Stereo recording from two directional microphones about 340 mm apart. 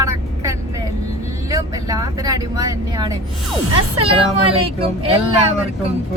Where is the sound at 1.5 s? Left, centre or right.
Centre.